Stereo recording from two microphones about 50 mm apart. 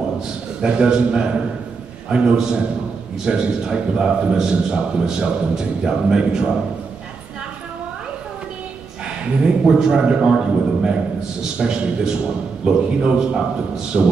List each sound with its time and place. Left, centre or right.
0.6 s a man's voice: centre
9.4 s a man's voice: centre